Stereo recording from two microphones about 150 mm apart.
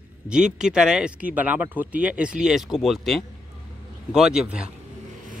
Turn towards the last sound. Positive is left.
turn(degrees=-5)  # may be behind; listen again after turning